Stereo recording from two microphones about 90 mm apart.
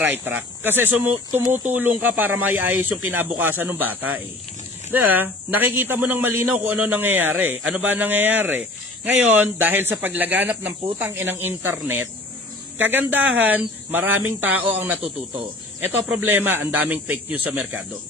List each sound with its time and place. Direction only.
0.0 s a man's voice: 20° right (ahead or behind)
12.7 s a man's voice: 20° right (ahead or behind)
16.1 s a man's voice: 20° right (ahead or behind)